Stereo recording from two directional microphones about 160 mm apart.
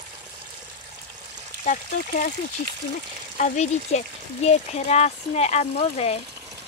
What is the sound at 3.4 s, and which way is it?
Speech, 45° left (ahead or behind).